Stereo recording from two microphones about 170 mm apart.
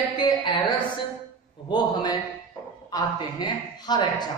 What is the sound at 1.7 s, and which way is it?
A man's voice, 25° left (ahead or behind).